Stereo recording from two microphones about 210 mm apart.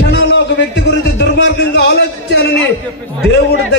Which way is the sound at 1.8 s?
50° left (ahead or behind).